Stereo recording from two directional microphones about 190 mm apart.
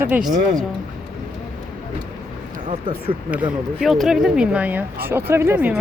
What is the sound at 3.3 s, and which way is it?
Speech, 5° right (ahead or behind).